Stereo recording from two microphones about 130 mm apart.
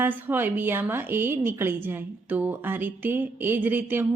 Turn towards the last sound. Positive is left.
turn(degrees=-15)  # may be behind; listen again after turning